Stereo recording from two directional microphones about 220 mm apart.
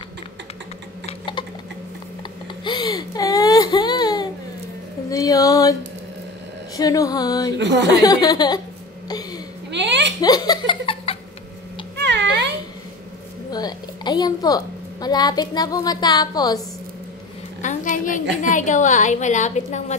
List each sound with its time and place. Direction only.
1.0 s typing: 20° left (ahead or behind)
2.6 s baby cry: 20° left (ahead or behind)
5.1 s a sound: 15° left (ahead or behind)
6.8 s music: 15° left (ahead or behind)
7.5 s a woman's voice: 50° right (ahead or behind)
8.0 s music: 15° left (ahead or behind)
9.7 s hiccup: 50° right (ahead or behind)
10.2 s laughter: 15° left (ahead or behind)
12.0 s cat: 50° right (ahead or behind)
13.5 s a woman's voice: 20° left (ahead or behind)
17.6 s a sound: 35° left (ahead or behind)
18.4 s a woman's voice: 35° left (ahead or behind)